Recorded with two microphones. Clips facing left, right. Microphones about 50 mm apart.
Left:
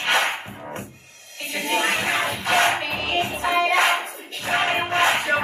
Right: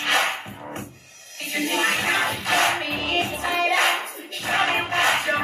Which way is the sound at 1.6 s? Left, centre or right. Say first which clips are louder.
Even; left.